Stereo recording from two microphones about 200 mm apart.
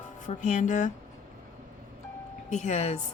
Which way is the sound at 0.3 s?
40° left (ahead or behind).